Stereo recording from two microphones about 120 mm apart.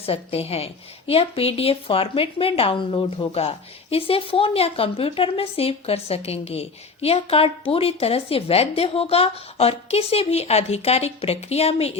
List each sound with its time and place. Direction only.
0.0 s a woman's voice: 55° left (ahead or behind)